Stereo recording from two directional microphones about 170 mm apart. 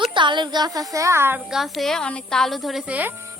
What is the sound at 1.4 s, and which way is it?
A woman's voice, centre (ahead or behind).